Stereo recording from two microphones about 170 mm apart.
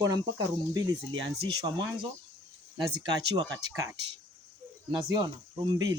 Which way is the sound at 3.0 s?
25° right (ahead or behind).